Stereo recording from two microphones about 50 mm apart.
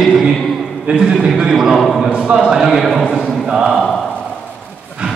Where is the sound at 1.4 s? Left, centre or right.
Centre.